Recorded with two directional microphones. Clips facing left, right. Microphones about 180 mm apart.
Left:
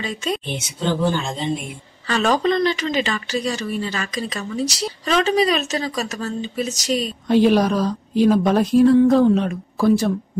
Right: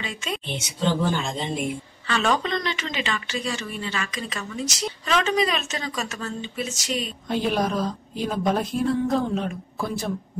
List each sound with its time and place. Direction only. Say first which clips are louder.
0.0 s speech: left 6 dB; 35° left (ahead or behind)
2.0 s speech: left 5 dB; 35° left (ahead or behind)
7.2 s a woman's voice: left 9 dB; 80° left